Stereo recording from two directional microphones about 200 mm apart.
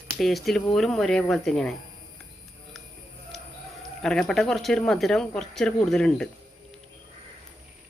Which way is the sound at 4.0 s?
5° left (ahead or behind).